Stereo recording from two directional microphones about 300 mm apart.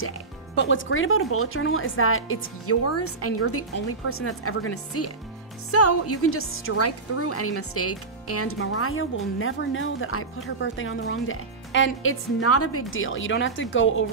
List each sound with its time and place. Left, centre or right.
0.6 s speech: left